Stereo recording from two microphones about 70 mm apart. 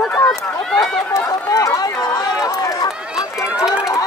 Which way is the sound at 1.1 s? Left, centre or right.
Left.